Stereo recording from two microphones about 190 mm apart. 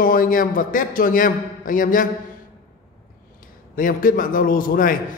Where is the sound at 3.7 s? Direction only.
45° left (ahead or behind).